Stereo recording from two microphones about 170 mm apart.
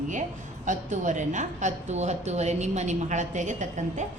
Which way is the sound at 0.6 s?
45° right (ahead or behind).